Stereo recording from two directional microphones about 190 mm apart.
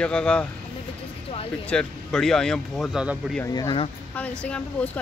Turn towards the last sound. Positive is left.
turn(degrees=5)  # may be behind; listen again after turning